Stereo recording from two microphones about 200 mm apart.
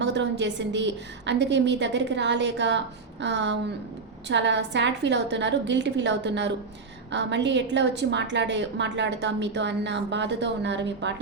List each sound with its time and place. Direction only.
0.0 s a woman's voice: 60° right (ahead or behind)